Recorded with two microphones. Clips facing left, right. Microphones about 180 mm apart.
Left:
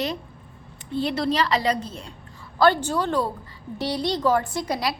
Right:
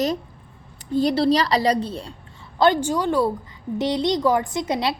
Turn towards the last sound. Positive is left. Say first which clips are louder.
# right 3 dB
turn(degrees=-25)  # may be behind; listen again after turning